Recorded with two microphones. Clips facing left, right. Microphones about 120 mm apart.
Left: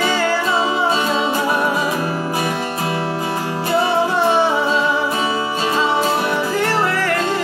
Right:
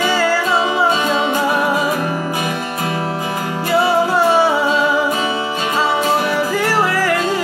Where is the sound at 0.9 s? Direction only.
35° left (ahead or behind).